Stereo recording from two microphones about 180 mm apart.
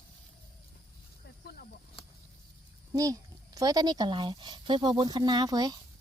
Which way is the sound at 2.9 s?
20° right (ahead or behind).